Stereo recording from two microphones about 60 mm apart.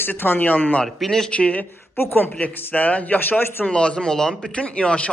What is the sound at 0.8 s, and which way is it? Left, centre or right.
Speech, centre.